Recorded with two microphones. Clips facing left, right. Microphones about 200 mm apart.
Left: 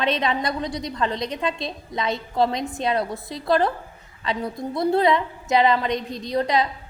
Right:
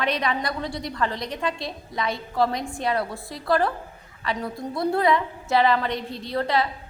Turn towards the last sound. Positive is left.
turn(degrees=15)  # may be behind; listen again after turning